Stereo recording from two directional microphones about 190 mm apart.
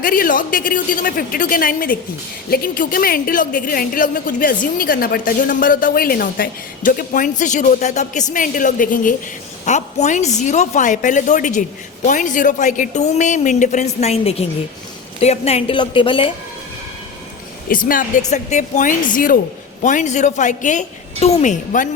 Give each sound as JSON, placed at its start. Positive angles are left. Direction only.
{"t": 0.0, "sound": "a woman's voice", "side_deg": 50}
{"t": 17.7, "sound": "a woman's voice", "side_deg": 45}